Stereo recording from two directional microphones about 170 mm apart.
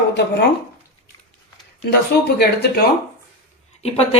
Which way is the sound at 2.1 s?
70° left (ahead or behind).